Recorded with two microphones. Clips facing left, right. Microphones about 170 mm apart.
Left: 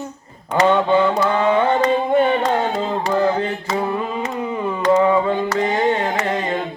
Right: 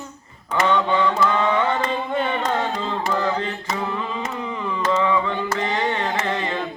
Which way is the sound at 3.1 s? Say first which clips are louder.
Left 6 dB; 30° left (ahead or behind).